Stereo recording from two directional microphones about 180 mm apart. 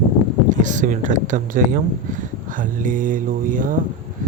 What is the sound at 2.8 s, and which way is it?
Speech, 45° right (ahead or behind).